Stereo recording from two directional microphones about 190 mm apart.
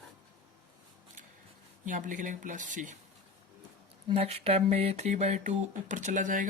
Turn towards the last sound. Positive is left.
turn(degrees=-45)  # may be behind; listen again after turning